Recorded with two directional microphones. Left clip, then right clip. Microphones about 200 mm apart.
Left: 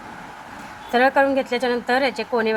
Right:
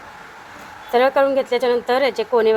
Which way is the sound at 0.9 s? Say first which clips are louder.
Right 2 dB; 20° right (ahead or behind).